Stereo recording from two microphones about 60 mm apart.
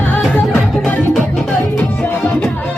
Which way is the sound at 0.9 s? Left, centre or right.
Left.